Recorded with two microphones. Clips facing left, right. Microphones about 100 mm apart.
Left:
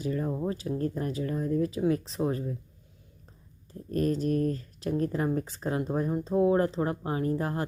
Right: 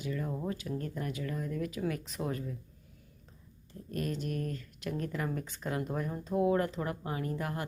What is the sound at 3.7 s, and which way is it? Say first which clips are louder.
Speech: left 8 dB; 40° left (ahead or behind).